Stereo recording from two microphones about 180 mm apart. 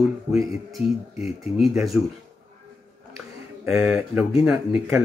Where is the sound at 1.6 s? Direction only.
Centre (ahead or behind).